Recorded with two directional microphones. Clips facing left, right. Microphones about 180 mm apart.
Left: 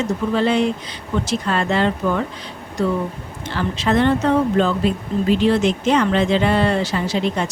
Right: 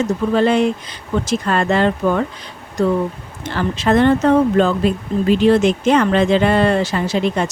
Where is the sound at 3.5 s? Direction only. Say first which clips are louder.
Right 3 dB; 50° right (ahead or behind).